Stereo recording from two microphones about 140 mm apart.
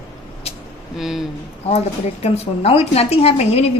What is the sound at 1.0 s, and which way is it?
Speech, centre (ahead or behind).